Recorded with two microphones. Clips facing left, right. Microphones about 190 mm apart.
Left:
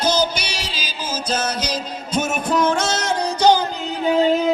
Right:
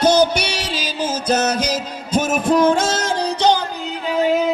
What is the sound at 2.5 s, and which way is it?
Music, 50° right (ahead or behind).